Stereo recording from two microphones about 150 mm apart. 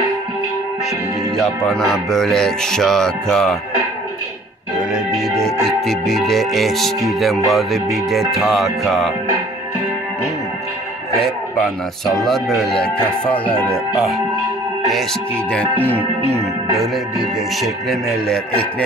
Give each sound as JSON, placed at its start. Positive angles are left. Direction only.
{"t": 1.3, "sound": "music", "side_deg": 5}
{"t": 4.7, "sound": "organ", "side_deg": -5}
{"t": 5.4, "sound": "music", "side_deg": 0}
{"t": 12.2, "sound": "music", "side_deg": 0}
{"t": 16.2, "sound": "music", "side_deg": -40}
{"t": 16.7, "sound": "music", "side_deg": 0}